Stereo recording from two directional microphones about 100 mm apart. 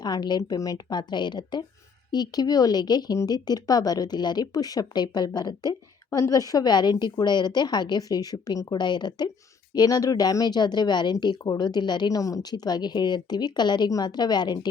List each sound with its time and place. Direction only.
0.0 s speech: 45° left (ahead or behind)
6.1 s speech: 30° left (ahead or behind)